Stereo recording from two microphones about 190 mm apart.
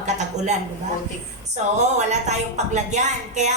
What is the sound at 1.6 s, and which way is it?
Speech, 40° right (ahead or behind).